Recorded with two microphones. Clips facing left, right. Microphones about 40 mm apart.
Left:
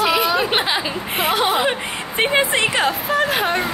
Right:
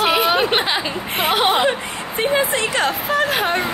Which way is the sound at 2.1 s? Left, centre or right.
Left.